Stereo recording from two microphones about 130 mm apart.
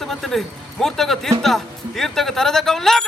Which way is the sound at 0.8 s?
Centre (ahead or behind).